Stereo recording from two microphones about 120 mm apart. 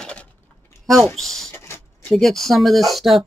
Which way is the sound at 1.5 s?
15° left (ahead or behind).